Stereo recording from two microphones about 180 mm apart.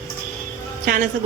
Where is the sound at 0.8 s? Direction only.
50° right (ahead or behind).